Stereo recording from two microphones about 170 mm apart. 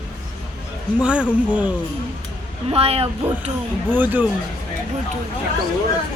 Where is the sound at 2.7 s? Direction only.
35° right (ahead or behind).